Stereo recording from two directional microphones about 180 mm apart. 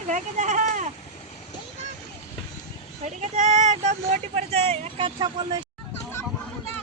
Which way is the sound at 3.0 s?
40° right (ahead or behind).